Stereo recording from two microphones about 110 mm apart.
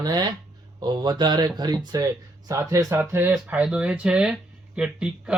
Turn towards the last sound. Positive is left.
turn(degrees=-10)  # may be behind; listen again after turning